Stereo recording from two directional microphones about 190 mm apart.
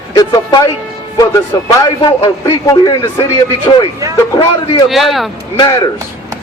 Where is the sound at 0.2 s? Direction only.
20° left (ahead or behind).